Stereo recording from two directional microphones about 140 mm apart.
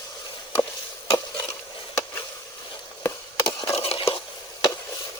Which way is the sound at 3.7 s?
45° left (ahead or behind).